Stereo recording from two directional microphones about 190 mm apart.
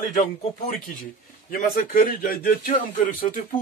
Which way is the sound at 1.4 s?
50° left (ahead or behind).